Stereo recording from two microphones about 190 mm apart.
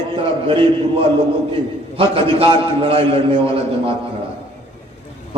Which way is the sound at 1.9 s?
30° right (ahead or behind).